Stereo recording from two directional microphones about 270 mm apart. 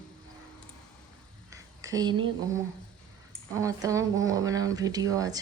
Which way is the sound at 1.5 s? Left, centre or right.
Centre.